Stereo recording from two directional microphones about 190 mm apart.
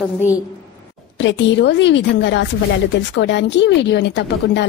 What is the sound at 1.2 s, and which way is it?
A woman's voice, 70° left (ahead or behind).